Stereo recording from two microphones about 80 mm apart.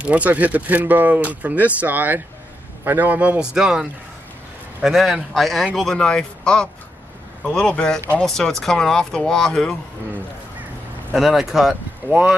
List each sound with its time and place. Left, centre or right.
0.0 s speech: centre
3.5 s speech: centre
4.8 s a man's voice: centre
11.1 s a man's voice: centre
12.1 s speech: right